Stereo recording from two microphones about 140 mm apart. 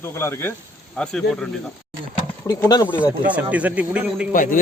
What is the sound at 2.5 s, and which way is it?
Speech, 25° left (ahead or behind).